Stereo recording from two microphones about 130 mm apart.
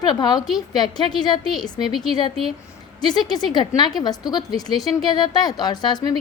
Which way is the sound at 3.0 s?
35° left (ahead or behind).